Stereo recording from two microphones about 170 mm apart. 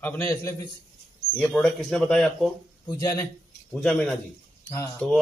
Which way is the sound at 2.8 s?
20° left (ahead or behind).